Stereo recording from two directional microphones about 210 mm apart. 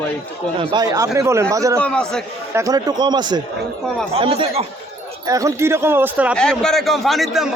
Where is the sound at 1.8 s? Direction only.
5° left (ahead or behind).